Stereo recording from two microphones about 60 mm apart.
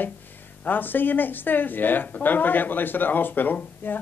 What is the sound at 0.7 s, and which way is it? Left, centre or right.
A man's voice, left.